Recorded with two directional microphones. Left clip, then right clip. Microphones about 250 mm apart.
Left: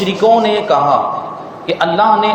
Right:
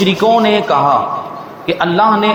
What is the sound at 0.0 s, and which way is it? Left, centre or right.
A man's voice, right.